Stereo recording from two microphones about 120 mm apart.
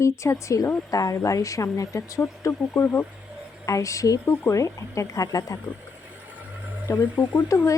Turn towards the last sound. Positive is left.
turn(degrees=25)  # may be behind; listen again after turning